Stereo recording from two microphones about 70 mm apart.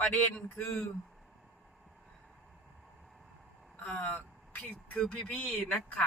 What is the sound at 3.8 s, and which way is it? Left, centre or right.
Speech, left.